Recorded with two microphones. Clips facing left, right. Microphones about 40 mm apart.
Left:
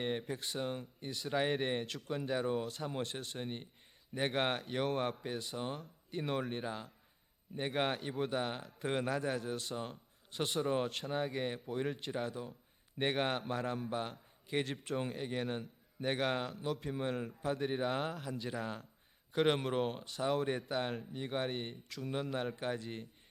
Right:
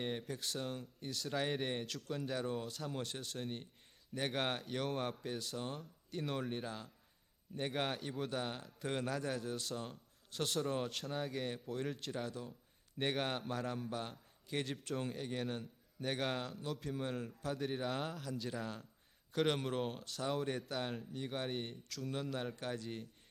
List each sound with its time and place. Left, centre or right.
0.0 s a man's voice: centre
21.4 s a man's voice: centre
21.7 s a man's voice: centre